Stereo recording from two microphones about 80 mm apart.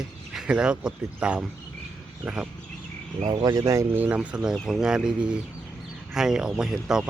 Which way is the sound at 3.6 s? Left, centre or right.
Right.